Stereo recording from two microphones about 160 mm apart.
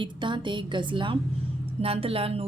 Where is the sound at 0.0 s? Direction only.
30° right (ahead or behind).